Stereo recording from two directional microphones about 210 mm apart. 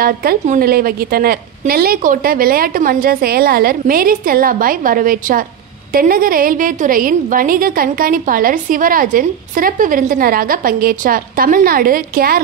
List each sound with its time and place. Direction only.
0.0 s a woman's voice: 45° right (ahead or behind)